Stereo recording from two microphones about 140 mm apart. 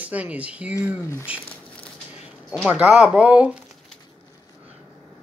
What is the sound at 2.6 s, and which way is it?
Speech, 10° right (ahead or behind).